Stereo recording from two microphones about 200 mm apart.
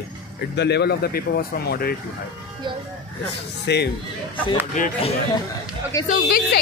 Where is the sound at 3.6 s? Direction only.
55° left (ahead or behind).